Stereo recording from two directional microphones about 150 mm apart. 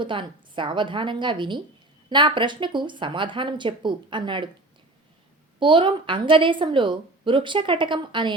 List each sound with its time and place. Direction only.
0.0 s a woman's voice: 35° right (ahead or behind)
5.5 s a woman's voice: 35° right (ahead or behind)